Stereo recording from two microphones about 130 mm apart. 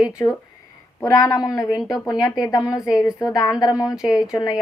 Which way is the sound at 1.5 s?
30° left (ahead or behind).